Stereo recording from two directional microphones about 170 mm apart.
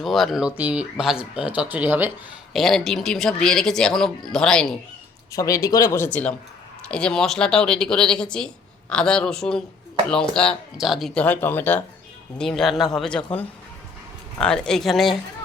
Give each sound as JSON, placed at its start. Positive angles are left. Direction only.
{"t": 0.0, "sound": "speech", "side_deg": 0}
{"t": 2.5, "sound": "speech", "side_deg": 0}
{"t": 5.3, "sound": "speech", "side_deg": 20}